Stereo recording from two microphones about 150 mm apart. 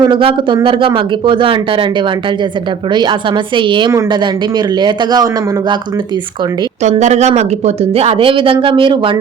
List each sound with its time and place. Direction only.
0.0 s speech: 35° right (ahead or behind)
2.9 s a man's voice: 30° right (ahead or behind)
7.0 s speech: 50° right (ahead or behind); by 9.1 s 35° right (ahead or behind)